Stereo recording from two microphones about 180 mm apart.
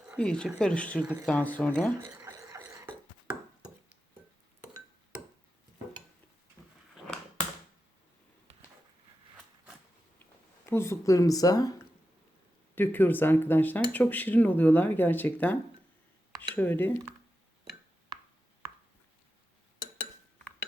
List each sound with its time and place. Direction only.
0.2 s speech: 5° left (ahead or behind)
1.0 s speech: 10° right (ahead or behind)
1.3 s speech: 10° left (ahead or behind)
2.0 s a sound: 15° right (ahead or behind)
10.7 s speech: 15° left (ahead or behind)
12.7 s speech: 10° left (ahead or behind)